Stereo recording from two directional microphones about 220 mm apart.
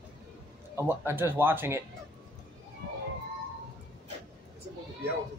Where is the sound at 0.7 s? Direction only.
10° right (ahead or behind).